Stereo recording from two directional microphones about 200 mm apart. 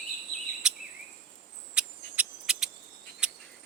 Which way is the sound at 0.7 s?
5° right (ahead or behind).